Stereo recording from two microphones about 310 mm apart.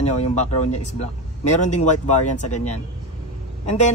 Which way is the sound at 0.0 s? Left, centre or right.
Left.